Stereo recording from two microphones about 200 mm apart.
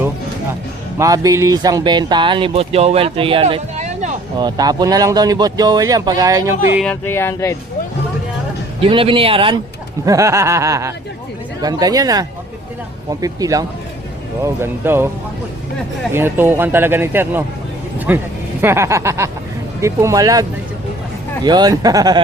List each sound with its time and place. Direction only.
0.9 s speech: 15° right (ahead or behind); by 4.1 s 35° right (ahead or behind)
4.4 s speech: 20° right (ahead or behind)
6.9 s speech: 10° left (ahead or behind)
8.8 s speech: 25° right (ahead or behind)
10.1 s speech: 15° right (ahead or behind)
16.1 s speech: 10° right (ahead or behind)